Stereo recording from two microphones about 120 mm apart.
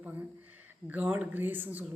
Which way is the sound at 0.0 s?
15° right (ahead or behind).